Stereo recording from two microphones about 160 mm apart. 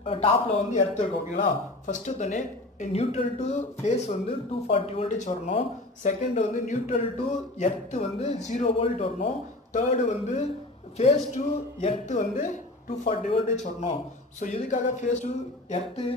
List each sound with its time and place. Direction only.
0.0 s a man's voice: 35° left (ahead or behind)
0.7 s speech: 50° left (ahead or behind)